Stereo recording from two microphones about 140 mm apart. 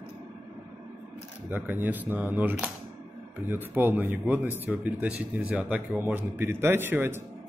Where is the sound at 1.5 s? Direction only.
15° right (ahead or behind).